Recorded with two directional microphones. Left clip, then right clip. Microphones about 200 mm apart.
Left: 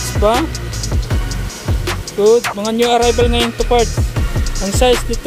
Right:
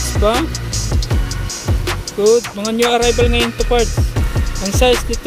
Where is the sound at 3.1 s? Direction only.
15° left (ahead or behind).